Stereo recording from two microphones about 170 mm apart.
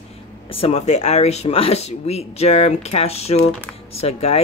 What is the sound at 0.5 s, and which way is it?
Speech, 35° left (ahead or behind).